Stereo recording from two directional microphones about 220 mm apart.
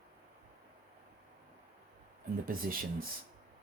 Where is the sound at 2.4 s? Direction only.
40° right (ahead or behind).